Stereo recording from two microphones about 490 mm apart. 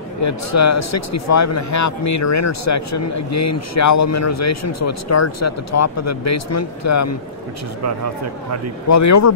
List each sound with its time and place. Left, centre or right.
0.2 s speech: left
7.8 s speech: right
8.8 s speech: left